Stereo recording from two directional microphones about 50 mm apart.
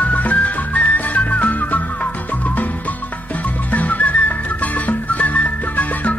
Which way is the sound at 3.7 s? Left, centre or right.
Left.